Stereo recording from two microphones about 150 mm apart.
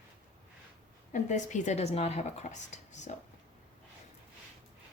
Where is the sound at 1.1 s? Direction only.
55° left (ahead or behind).